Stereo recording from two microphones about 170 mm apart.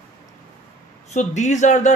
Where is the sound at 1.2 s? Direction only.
45° left (ahead or behind).